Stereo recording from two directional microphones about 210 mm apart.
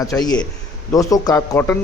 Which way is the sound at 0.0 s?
15° left (ahead or behind).